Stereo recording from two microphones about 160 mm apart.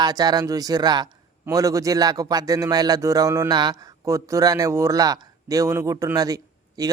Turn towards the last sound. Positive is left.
turn(degrees=-25)  # may be behind; listen again after turning